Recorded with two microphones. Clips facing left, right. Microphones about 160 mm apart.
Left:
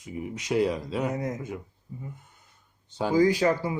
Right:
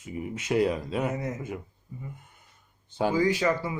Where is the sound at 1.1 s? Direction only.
35° left (ahead or behind).